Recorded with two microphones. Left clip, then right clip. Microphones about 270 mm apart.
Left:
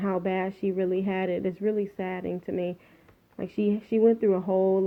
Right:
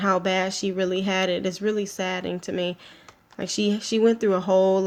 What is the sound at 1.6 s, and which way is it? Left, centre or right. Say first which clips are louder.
Speech: right 3 dB; right.